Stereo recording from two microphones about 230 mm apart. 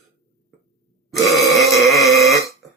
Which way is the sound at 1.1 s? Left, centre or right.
Centre.